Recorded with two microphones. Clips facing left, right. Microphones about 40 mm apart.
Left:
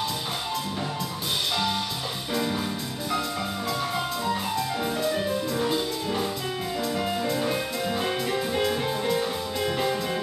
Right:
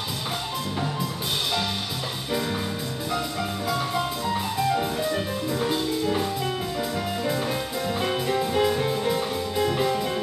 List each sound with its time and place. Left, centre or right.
3.9 s music: centre